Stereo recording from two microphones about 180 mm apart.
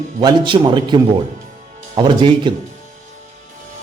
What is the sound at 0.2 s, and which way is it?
Speech, 25° right (ahead or behind).